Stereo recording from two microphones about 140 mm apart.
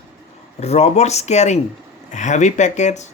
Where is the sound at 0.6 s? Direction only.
50° left (ahead or behind).